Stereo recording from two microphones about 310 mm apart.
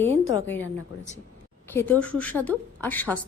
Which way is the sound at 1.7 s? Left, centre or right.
Centre.